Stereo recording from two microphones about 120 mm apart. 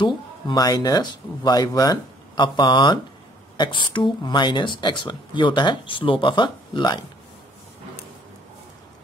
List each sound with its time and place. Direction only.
0.0 s speech: 35° left (ahead or behind)